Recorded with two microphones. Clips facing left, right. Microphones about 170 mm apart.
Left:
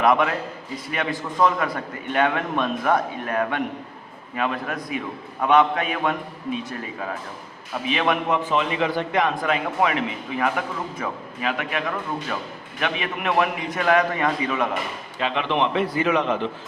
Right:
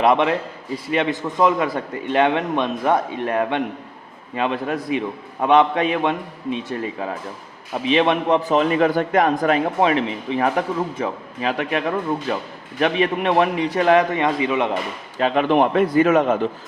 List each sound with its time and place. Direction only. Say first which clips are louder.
0.0 s a man's voice: right 3 dB; 30° right (ahead or behind)
15.2 s a man's voice: right 6 dB; 45° right (ahead or behind)